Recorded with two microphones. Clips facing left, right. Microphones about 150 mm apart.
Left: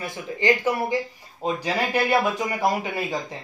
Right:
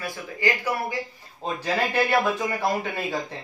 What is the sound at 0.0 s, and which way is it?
Speech, 20° left (ahead or behind).